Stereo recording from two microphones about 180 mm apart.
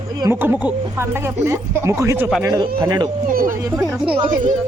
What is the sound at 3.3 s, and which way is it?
Speech, 50° right (ahead or behind).